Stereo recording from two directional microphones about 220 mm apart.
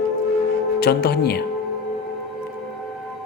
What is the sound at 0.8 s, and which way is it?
Speech, 45° left (ahead or behind).